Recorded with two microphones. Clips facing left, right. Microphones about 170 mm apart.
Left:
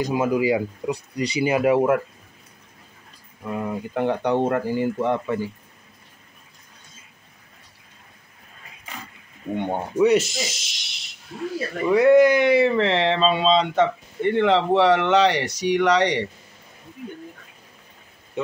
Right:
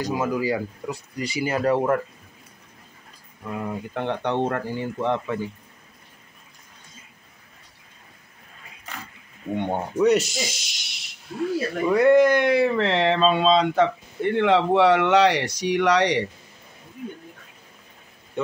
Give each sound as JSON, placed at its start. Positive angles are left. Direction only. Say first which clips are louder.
{"t": 0.0, "sound": "speech", "louder": "left 3 dB", "side_deg": 20}
{"t": 3.5, "sound": "speech", "louder": "left 3 dB", "side_deg": 5}
{"t": 9.6, "sound": "speech", "louder": "left 2 dB", "side_deg": 5}